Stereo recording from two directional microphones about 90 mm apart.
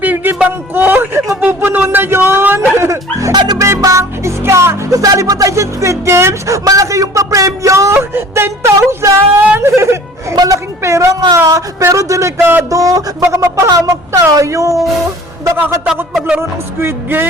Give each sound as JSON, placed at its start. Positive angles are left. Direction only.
{"t": 0.0, "sound": "a sound", "side_deg": -20}
{"t": 2.6, "sound": "music", "side_deg": -30}
{"t": 3.3, "sound": "music", "side_deg": -50}
{"t": 3.6, "sound": "music", "side_deg": -35}
{"t": 9.6, "sound": "a sound", "side_deg": -30}
{"t": 10.3, "sound": "a sound", "side_deg": -40}
{"t": 14.1, "sound": "wail", "side_deg": -35}
{"t": 15.4, "sound": "music", "side_deg": -35}
{"t": 16.8, "sound": "music", "side_deg": -25}